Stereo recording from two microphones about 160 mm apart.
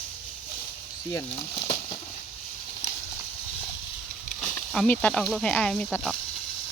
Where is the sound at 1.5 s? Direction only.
30° left (ahead or behind).